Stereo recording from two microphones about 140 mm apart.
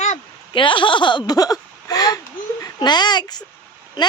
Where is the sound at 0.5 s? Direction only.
35° left (ahead or behind).